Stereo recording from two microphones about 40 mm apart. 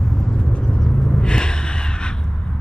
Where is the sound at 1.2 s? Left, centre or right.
Left.